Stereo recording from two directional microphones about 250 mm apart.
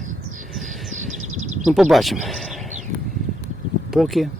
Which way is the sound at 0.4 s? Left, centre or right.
Centre.